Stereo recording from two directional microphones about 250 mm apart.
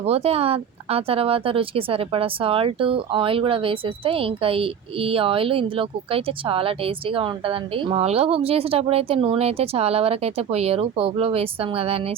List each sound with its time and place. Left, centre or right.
0.0 s speech: right